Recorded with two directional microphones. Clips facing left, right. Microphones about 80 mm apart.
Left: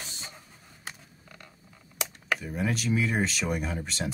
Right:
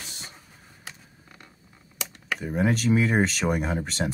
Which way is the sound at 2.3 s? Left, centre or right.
Right.